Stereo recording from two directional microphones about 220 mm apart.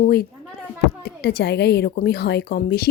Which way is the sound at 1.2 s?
50° left (ahead or behind).